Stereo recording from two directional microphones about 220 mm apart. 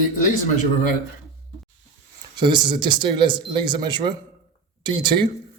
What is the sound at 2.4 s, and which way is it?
Speech, 20° right (ahead or behind).